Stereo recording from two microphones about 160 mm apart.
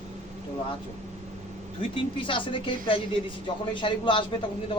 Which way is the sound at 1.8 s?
35° left (ahead or behind).